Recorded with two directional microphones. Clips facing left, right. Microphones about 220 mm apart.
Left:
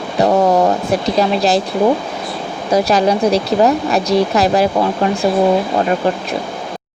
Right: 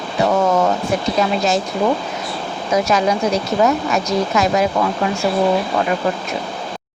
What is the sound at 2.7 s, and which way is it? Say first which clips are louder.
Speech: left 3 dB; 35° left (ahead or behind).